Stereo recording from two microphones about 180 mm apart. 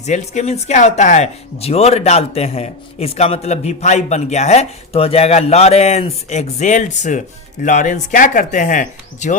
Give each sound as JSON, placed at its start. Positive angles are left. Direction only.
{"t": 0.0, "sound": "speech", "side_deg": 40}